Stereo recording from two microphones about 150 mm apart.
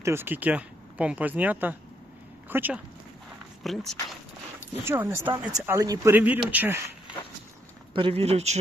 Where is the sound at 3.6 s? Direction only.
Centre (ahead or behind).